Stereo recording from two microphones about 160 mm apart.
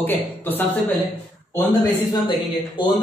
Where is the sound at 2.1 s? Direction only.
30° left (ahead or behind).